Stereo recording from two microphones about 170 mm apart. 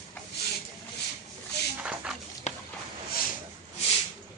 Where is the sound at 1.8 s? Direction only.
5° right (ahead or behind).